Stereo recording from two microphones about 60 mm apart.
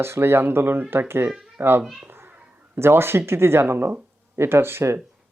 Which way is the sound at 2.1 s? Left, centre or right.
Right.